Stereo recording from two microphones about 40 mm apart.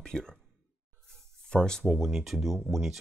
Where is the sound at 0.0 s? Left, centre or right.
Centre.